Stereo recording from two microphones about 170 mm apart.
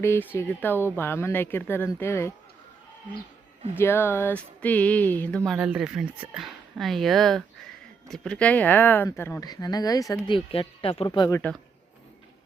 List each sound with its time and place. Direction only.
0.0 s speech: 15° left (ahead or behind)
3.8 s speech: 15° left (ahead or behind)
5.5 s speech: 5° right (ahead or behind); by 11.3 s 30° left (ahead or behind)
11.3 s speech: 15° left (ahead or behind)